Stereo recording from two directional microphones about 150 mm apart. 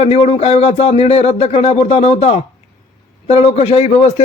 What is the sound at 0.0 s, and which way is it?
Speech, 45° left (ahead or behind).